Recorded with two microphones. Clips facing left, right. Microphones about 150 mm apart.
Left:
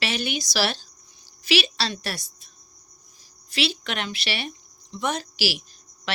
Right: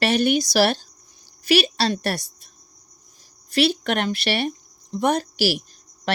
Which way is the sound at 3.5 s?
55° right (ahead or behind).